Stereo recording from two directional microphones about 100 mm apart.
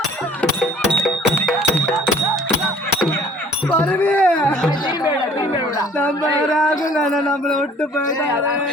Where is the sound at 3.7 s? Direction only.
15° left (ahead or behind).